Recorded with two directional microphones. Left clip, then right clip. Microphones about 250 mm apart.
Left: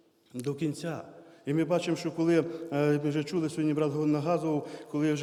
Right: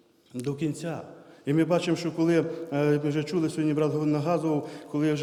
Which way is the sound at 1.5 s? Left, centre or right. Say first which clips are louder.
Right 4 dB; centre.